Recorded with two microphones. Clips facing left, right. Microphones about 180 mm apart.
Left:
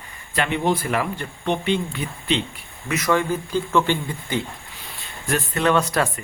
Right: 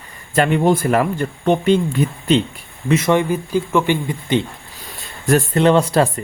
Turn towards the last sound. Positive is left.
turn(degrees=-30)  # may be behind; listen again after turning